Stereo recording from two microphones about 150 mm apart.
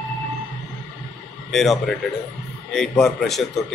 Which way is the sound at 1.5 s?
Centre (ahead or behind).